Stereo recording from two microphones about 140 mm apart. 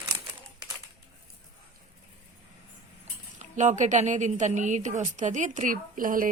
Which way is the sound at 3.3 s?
60° right (ahead or behind).